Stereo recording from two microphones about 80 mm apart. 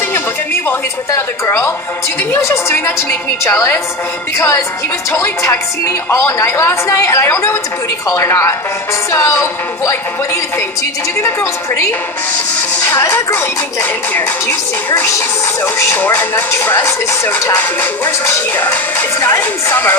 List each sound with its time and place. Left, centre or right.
0.7 s a woman's voice: left
4.4 s a woman's voice: left
11.1 s a woman's voice: left
13.0 s a woman's voice: left
16.0 s speech: left